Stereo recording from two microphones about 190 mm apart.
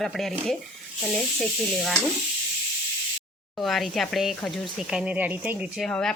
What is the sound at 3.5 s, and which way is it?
Speech, centre (ahead or behind).